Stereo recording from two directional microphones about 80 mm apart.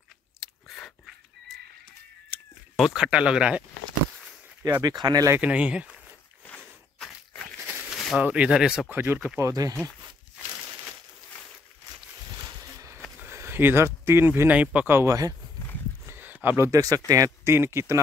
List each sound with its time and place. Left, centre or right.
0.4 s chewing: centre
2.8 s speech: centre
4.8 s speech: right
5.4 s speech: centre
7.9 s a sound: centre
8.2 s speech: centre
8.9 s speech: right
9.4 s speech: right
13.2 s speech: right
14.5 s speech: centre
14.9 s speech: right
16.1 s a sound: right
16.4 s speech: right
17.6 s speech: right